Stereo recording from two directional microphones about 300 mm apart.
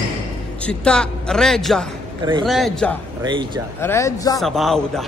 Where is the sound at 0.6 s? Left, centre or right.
Centre.